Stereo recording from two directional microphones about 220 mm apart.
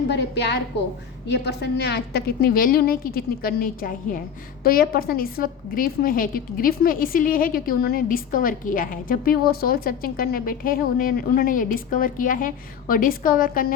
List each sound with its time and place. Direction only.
0.1 s a woman's voice: 50° left (ahead or behind)